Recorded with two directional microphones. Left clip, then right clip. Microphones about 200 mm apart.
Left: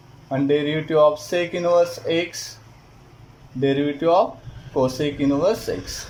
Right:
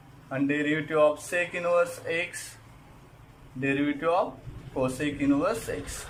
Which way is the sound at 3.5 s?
35° left (ahead or behind).